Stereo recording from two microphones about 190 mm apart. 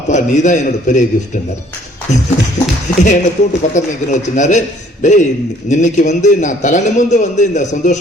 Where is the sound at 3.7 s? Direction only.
40° left (ahead or behind).